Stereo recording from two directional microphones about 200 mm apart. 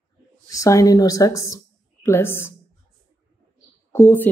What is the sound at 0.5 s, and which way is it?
Speech, 15° left (ahead or behind).